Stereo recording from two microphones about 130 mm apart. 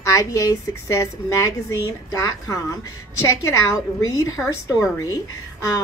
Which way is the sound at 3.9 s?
25° left (ahead or behind).